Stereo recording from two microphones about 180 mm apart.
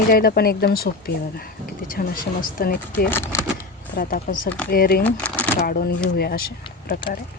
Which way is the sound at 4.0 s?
50° left (ahead or behind).